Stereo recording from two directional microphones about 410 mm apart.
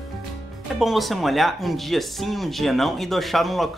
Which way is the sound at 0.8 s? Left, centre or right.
Centre.